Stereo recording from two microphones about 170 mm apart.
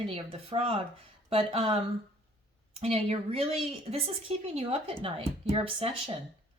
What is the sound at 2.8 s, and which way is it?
A woman's voice, 35° right (ahead or behind).